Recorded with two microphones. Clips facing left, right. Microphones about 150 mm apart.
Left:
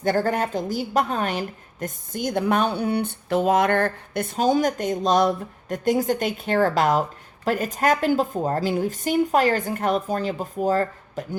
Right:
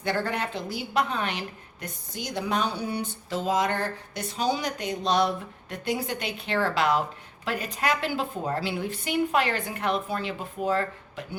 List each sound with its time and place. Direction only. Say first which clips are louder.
0.0 s a woman's voice: left 6 dB; 45° left (ahead or behind)